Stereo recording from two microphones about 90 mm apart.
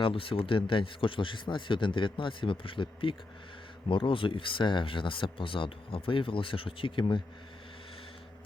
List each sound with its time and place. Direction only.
0.0 s speech: 85° left; by 7.2 s 70° left (ahead or behind)